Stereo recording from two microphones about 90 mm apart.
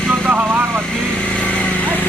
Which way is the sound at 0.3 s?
20° right (ahead or behind).